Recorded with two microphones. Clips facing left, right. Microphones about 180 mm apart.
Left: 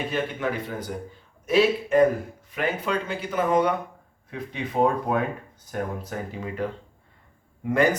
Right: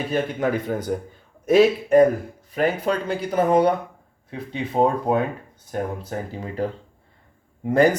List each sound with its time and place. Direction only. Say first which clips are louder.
0.1 s a man's voice: right 5 dB; 40° right (ahead or behind)